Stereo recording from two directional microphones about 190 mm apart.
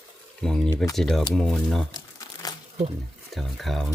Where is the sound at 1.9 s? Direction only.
20° left (ahead or behind).